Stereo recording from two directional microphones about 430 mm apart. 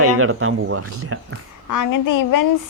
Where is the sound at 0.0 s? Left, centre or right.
Right.